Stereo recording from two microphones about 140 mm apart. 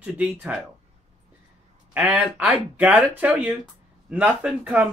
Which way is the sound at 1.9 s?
10° right (ahead or behind).